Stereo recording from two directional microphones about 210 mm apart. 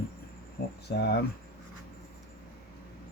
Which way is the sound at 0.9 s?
50° left (ahead or behind).